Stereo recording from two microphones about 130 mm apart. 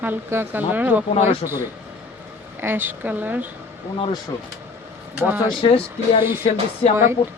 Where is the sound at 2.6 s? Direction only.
15° right (ahead or behind).